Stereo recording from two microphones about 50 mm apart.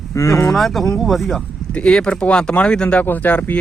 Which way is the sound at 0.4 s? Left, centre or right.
Centre.